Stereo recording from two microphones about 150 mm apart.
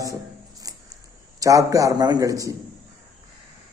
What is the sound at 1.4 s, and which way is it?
A man's voice, 20° right (ahead or behind).